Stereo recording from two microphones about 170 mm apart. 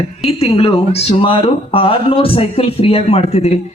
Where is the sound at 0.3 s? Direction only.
35° left (ahead or behind).